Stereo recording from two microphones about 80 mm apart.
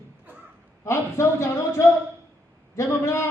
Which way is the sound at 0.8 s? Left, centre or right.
Left.